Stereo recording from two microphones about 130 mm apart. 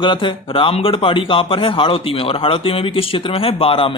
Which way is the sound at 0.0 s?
40° left (ahead or behind).